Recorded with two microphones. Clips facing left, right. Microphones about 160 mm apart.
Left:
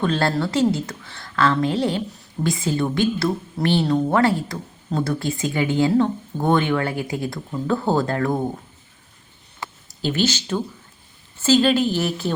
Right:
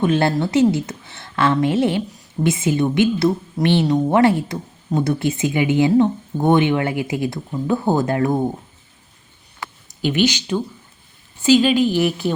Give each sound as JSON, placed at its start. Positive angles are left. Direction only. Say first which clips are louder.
{"t": 0.0, "sound": "speech", "louder": "right 3 dB", "side_deg": -20}
{"t": 10.1, "sound": "speech", "louder": "right 3 dB", "side_deg": -15}